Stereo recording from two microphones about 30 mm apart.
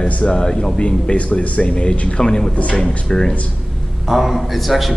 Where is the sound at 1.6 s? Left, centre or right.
Left.